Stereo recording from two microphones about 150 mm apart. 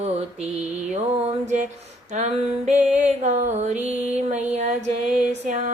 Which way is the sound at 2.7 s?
55° right (ahead or behind).